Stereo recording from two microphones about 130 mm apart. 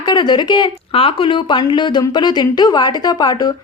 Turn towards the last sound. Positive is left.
turn(degrees=30)  # may be behind; listen again after turning